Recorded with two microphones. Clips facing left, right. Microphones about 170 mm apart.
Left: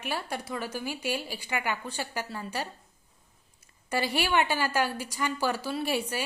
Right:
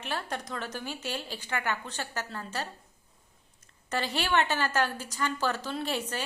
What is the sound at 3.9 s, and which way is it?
A woman's voice, 10° left (ahead or behind).